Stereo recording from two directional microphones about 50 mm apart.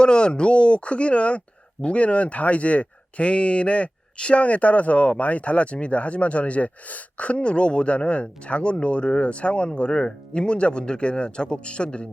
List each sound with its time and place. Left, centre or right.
0.0 s speech: centre